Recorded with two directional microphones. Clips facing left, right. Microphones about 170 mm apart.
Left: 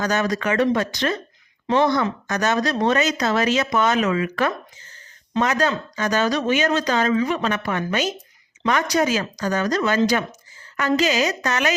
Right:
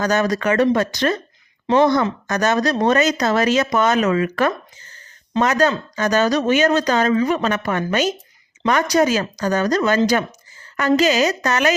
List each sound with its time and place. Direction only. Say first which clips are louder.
0.0 s speech: right 3 dB; 40° right (ahead or behind)